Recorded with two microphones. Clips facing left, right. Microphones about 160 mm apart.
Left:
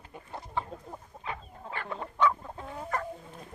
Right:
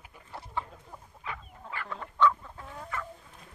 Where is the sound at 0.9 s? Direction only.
30° left (ahead or behind).